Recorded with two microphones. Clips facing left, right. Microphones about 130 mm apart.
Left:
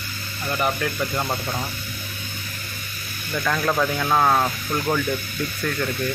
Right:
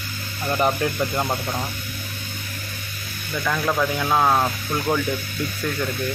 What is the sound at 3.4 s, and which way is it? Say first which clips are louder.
Speech: even; 5° right (ahead or behind).